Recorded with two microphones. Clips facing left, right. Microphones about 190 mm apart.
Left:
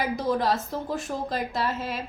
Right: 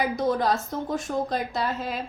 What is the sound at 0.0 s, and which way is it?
A woman's voice, centre (ahead or behind).